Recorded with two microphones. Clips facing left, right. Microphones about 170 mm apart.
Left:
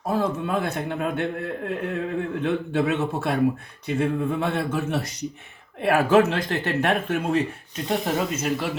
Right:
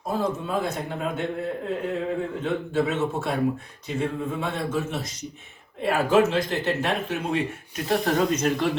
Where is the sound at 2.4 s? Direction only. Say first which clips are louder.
Left 2 dB; 60° left (ahead or behind).